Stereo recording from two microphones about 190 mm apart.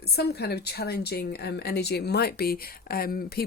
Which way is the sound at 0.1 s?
60° left (ahead or behind).